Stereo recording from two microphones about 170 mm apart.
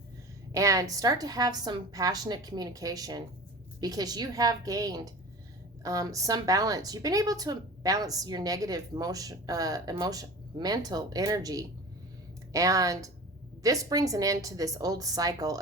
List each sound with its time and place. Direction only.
0.5 s a woman's voice: 20° right (ahead or behind)